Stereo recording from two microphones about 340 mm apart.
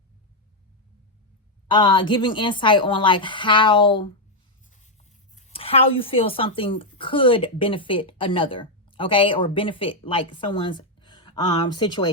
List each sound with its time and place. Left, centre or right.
1.6 s speech: centre
5.4 s speech: centre